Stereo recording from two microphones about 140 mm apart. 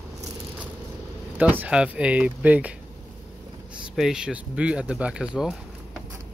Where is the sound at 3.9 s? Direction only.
5° right (ahead or behind).